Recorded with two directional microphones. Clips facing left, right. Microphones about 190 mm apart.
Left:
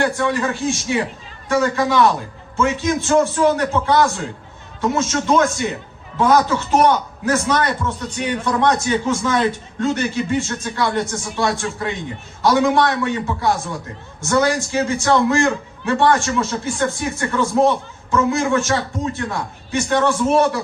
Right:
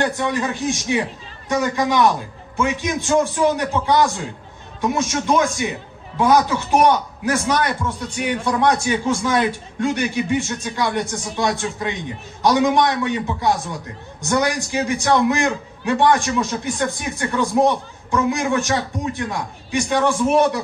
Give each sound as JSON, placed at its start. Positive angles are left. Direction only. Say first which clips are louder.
{"t": 0.0, "sound": "a man's voice", "louder": "left 2 dB", "side_deg": -20}